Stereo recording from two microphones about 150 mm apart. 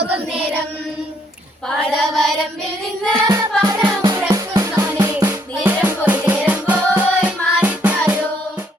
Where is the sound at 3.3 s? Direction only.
20° right (ahead or behind).